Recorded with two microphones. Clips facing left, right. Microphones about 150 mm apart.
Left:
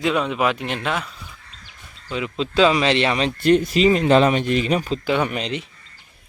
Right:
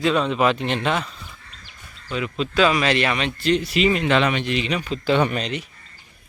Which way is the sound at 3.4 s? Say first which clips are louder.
Left 5 dB; 50° left (ahead or behind).